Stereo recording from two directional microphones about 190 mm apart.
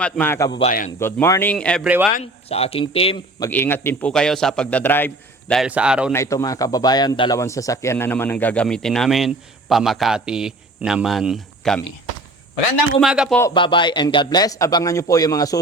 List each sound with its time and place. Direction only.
0.0 s speech: 10° left (ahead or behind)
2.5 s speech: 30° left (ahead or behind)
3.4 s speech: 10° left (ahead or behind)
5.6 s speech: 5° right (ahead or behind)
6.1 s speech: 15° left (ahead or behind)
13.0 s speech: 5° right (ahead or behind)
13.5 s a man's voice: 25° left (ahead or behind)